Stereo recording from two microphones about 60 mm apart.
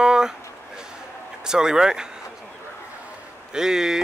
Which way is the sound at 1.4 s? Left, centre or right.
Centre.